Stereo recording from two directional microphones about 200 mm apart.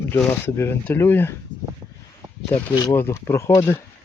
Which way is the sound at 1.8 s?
25° right (ahead or behind).